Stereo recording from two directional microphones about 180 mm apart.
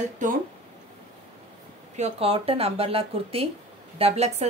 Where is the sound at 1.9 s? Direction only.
35° right (ahead or behind).